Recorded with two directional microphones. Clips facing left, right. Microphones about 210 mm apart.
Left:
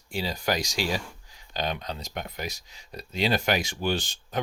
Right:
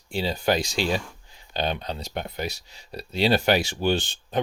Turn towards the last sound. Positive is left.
turn(degrees=-30)  # may be behind; listen again after turning